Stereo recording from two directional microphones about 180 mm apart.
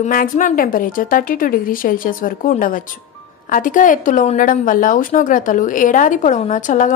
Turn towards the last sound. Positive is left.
turn(degrees=45)  # may be behind; listen again after turning